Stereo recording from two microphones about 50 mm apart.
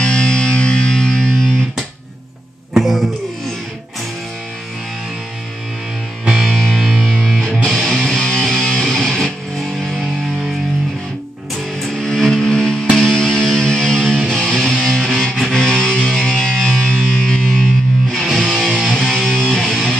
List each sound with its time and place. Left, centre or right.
0.0 s music: centre
2.7 s a sound: centre
6.4 s music: centre
11.8 s music: centre
18.1 s music: centre